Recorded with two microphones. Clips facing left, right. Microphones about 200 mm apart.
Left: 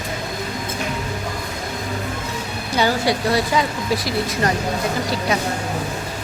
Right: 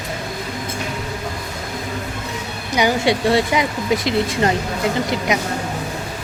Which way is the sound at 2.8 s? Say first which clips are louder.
Right 2 dB; 20° right (ahead or behind).